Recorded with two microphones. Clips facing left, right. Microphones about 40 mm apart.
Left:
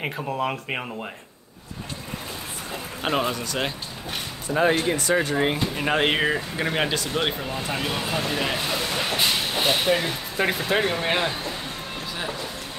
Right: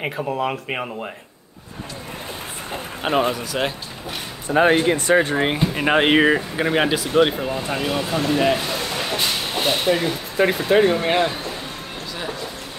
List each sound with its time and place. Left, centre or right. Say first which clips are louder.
0.0 s speech: right 3 dB; centre
3.0 s speech: right 4 dB; centre
4.5 s speech: right 5 dB; right
6.6 s speech: right 4 dB; centre